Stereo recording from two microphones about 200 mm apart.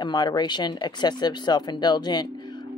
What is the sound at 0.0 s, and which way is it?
Speech, 20° left (ahead or behind).